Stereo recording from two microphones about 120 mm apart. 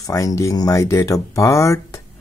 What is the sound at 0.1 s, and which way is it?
Speech, 30° left (ahead or behind).